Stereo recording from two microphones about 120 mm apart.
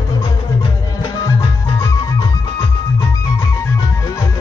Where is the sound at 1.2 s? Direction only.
30° left (ahead or behind).